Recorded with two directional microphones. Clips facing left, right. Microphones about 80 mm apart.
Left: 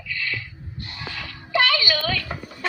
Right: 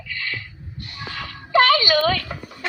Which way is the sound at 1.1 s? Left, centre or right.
Right.